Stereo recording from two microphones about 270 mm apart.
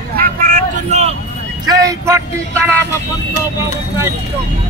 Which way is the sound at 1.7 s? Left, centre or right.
Centre.